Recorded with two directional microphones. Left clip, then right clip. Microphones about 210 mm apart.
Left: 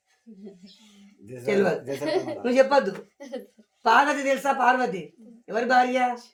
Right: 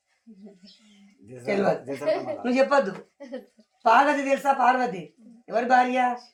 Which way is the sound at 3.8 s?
5° right (ahead or behind).